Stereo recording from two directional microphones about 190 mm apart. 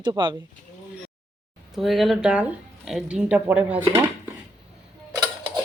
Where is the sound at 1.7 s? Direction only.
Centre (ahead or behind).